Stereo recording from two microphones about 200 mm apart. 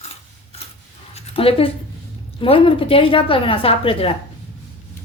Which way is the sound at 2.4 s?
25° left (ahead or behind).